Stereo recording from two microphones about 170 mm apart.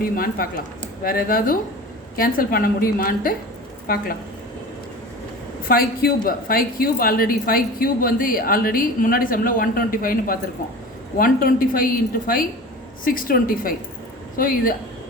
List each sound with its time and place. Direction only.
0.0 s a woman's voice: 60° left (ahead or behind)
5.6 s a woman's voice: 60° left (ahead or behind)